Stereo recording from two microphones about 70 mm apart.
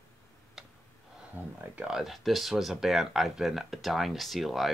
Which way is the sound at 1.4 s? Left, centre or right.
Right.